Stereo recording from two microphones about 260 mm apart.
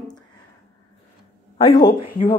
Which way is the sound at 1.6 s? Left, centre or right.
Left.